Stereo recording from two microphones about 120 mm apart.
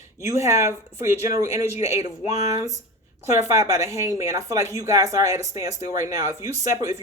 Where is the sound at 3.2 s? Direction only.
25° right (ahead or behind).